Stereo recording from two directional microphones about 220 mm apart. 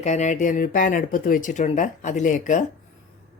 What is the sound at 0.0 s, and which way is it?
Speech, 30° left (ahead or behind).